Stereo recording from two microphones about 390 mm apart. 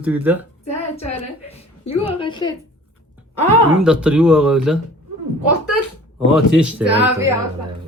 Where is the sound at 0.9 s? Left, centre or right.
Centre.